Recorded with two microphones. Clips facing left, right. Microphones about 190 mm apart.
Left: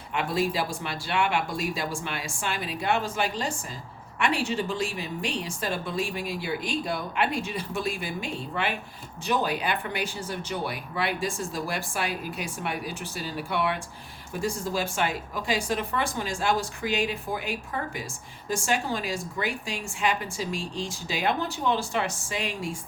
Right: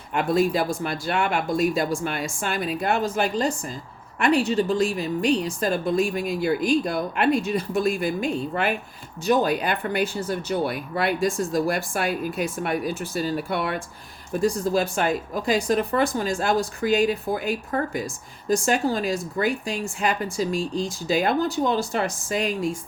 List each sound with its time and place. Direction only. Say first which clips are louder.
0.1 s speech: right 6 dB; 45° right (ahead or behind)